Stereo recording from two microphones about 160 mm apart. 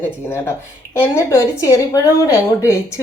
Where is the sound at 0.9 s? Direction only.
15° left (ahead or behind).